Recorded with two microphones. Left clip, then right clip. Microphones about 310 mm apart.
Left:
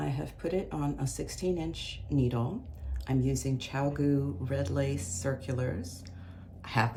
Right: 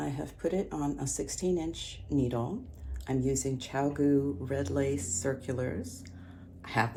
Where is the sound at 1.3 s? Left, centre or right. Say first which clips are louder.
Right 1 dB; left.